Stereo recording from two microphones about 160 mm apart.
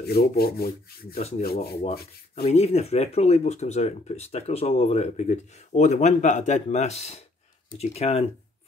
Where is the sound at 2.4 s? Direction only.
40° left (ahead or behind).